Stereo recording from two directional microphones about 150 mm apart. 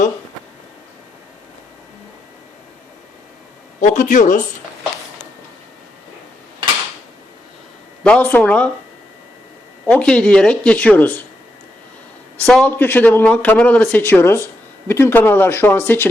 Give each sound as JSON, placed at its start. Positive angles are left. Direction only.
{"t": 3.8, "sound": "speech", "side_deg": 60}
{"t": 8.0, "sound": "speech", "side_deg": 10}
{"t": 9.8, "sound": "speech", "side_deg": 10}
{"t": 12.5, "sound": "speech", "side_deg": 10}